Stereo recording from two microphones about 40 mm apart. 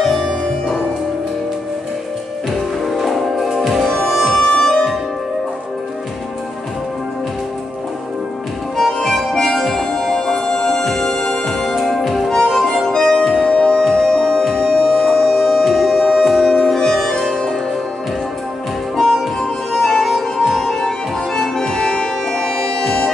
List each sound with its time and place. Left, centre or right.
0.2 s music: centre
3.0 s music: centre
8.7 s music: centre
9.3 s harmonica: centre
9.9 s music: centre
12.3 s music: centre
13.5 s music: left
13.7 s music: centre
16.7 s music: centre
20.0 s music: centre